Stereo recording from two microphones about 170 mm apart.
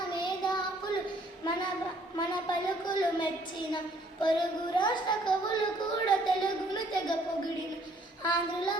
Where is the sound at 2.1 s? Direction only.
25° left (ahead or behind).